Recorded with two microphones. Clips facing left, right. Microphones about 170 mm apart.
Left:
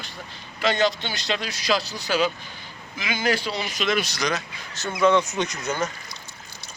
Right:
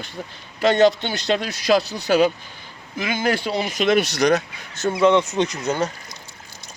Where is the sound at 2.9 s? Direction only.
50° right (ahead or behind).